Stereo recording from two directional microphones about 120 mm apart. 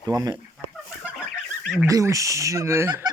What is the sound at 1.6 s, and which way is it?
Fowl, 5° right (ahead or behind).